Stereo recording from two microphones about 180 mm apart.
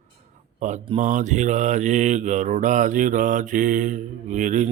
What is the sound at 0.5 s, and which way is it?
Speech, 45° right (ahead or behind).